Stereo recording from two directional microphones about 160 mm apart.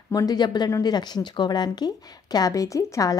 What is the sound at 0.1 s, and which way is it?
A woman's voice, 25° left (ahead or behind).